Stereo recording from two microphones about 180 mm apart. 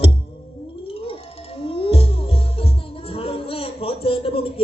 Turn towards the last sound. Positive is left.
turn(degrees=30)  # may be behind; listen again after turning